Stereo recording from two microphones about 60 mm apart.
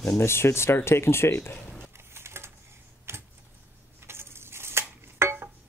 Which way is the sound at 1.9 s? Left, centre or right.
Right.